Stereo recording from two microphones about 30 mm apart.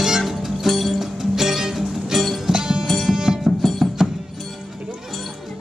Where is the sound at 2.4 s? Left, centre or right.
Right.